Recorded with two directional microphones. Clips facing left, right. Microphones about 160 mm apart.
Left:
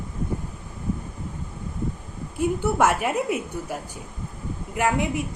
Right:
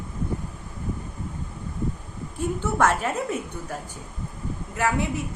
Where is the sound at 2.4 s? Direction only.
10° left (ahead or behind).